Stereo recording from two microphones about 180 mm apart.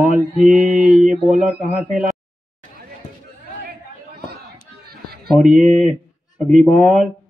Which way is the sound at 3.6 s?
65° right (ahead or behind).